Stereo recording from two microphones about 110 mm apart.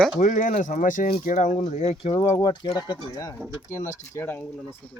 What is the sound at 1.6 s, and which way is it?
Speech, 90° left.